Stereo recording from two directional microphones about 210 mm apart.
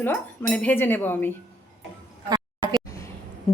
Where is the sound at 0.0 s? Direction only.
5° left (ahead or behind).